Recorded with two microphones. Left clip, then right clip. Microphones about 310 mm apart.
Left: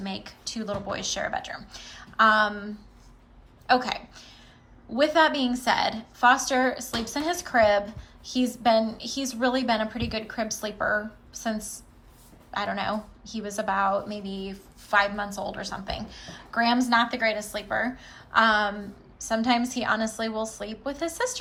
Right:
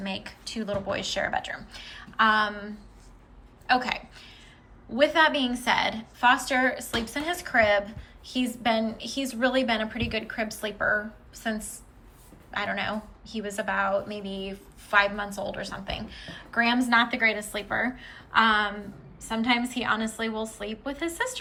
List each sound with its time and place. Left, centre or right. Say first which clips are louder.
0.0 s a woman's voice: right 1 dB; centre
3.8 s a woman's voice: even; centre